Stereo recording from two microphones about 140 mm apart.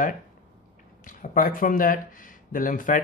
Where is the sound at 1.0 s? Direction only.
75° left (ahead or behind).